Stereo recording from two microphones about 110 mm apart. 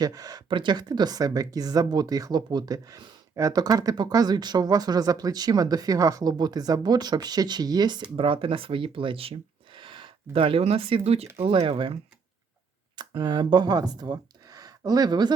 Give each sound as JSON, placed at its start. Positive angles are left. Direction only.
{"t": 0.0, "sound": "speech", "side_deg": -35}
{"t": 8.1, "sound": "speech", "side_deg": -55}
{"t": 11.4, "sound": "speech", "side_deg": -55}
{"t": 13.0, "sound": "speech", "side_deg": -45}
{"t": 14.0, "sound": "a sound", "side_deg": -40}